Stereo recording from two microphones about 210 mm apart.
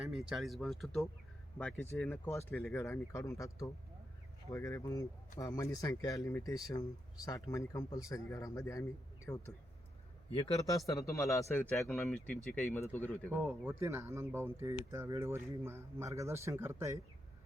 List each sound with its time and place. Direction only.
0.0 s speech: centre (ahead or behind)
13.3 s speech: 10° right (ahead or behind)